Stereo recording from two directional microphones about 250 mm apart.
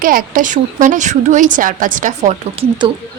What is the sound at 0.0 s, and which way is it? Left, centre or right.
A woman's voice, right.